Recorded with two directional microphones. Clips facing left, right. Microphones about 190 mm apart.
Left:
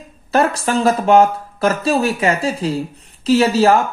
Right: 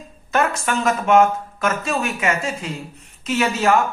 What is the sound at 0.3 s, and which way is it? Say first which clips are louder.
Speech: left 4 dB; 35° left (ahead or behind).